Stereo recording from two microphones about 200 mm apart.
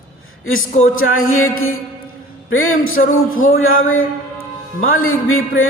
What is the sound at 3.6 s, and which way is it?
Speech, 90° left.